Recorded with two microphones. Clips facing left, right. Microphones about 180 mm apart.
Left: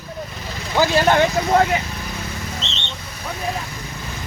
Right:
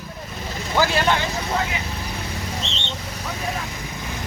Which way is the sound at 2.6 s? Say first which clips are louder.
Right 1 dB; 25° left (ahead or behind).